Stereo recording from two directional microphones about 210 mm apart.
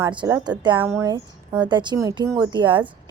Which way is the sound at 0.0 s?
20° right (ahead or behind).